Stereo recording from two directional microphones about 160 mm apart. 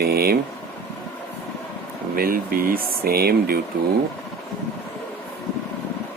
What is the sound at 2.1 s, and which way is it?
Speech, 65° right (ahead or behind).